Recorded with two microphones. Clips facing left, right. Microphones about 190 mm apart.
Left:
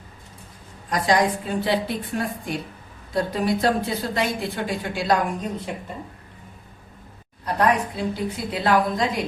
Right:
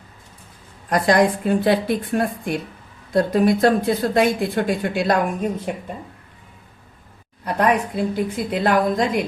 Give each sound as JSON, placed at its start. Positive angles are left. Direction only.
{"t": 0.9, "sound": "a woman's voice", "side_deg": -55}
{"t": 7.4, "sound": "speech", "side_deg": -55}